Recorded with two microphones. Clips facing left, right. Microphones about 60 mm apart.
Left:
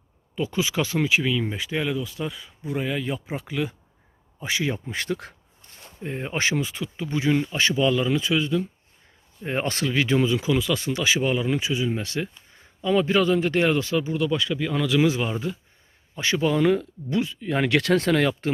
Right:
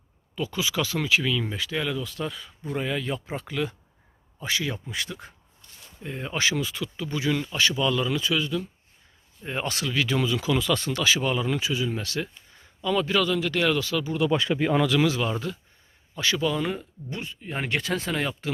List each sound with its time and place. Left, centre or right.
0.3 s speech: left; by 3.8 s centre
4.4 s speech: left
4.9 s speech: left
5.6 s speech: left
9.4 s a man's voice: left
10.5 s a man's voice: centre; by 14.1 s left
14.3 s speech: right
15.0 s speech: left
16.4 s speech: left
17.1 s speech: left